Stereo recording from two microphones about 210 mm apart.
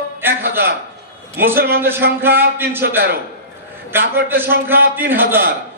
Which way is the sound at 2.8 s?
45° right (ahead or behind).